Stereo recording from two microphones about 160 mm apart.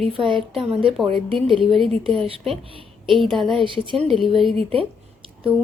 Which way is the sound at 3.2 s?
Centre (ahead or behind).